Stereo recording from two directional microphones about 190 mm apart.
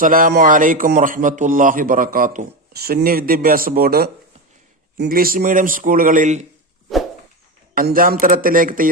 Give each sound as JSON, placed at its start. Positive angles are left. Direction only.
{"t": 0.0, "sound": "speech", "side_deg": -45}
{"t": 2.7, "sound": "speech", "side_deg": -55}
{"t": 7.8, "sound": "speech", "side_deg": -50}